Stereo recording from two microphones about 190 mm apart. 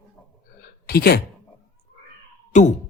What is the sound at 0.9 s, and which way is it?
Speech, 55° left (ahead or behind).